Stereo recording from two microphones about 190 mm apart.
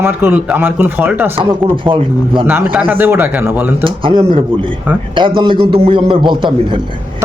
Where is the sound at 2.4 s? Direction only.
10° right (ahead or behind).